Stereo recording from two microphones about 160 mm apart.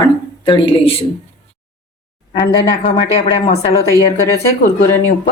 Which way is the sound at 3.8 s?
20° left (ahead or behind).